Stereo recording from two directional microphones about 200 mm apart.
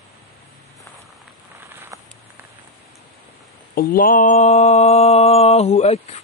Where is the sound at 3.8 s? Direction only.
45° left (ahead or behind).